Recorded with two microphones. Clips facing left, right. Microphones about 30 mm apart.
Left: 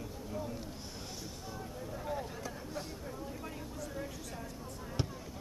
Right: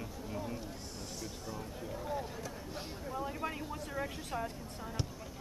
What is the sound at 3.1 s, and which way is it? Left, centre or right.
Vehicle, right.